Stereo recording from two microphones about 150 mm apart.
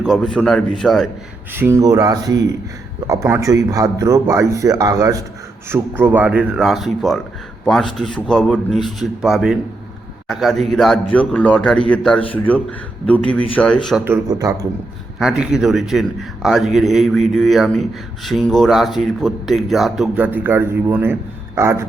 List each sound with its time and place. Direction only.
0.0 s a man's voice: 5° left (ahead or behind)
1.5 s a man's voice: 15° right (ahead or behind); by 13.4 s 10° left (ahead or behind)
14.0 s speech: 20° right (ahead or behind)
15.2 s a man's voice: 5° right (ahead or behind)